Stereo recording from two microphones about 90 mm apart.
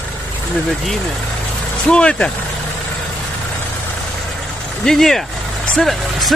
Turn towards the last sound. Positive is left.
turn(degrees=0)  # may be behind; listen again after turning